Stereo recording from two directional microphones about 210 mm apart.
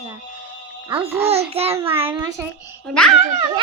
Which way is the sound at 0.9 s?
25° right (ahead or behind).